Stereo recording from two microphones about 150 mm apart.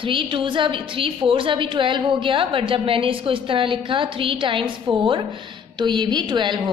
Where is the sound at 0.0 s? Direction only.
35° right (ahead or behind).